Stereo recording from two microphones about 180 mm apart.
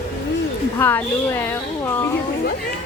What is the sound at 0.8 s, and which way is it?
Speech, 15° left (ahead or behind).